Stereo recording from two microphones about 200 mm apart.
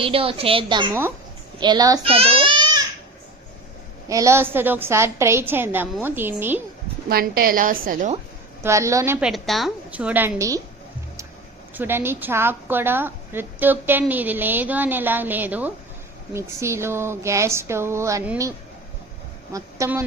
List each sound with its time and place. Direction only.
0.0 s a woman's voice: 30° right (ahead or behind)
4.1 s a woman's voice: 15° right (ahead or behind)
7.1 s a woman's voice: 50° right (ahead or behind)
8.6 s a woman's voice: 15° right (ahead or behind)
9.2 s a woman's voice: centre (ahead or behind)
11.7 s a woman's voice: 10° right (ahead or behind)
19.5 s a woman's voice: 15° right (ahead or behind)